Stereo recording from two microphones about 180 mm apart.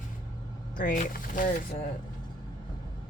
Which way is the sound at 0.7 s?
50° left (ahead or behind).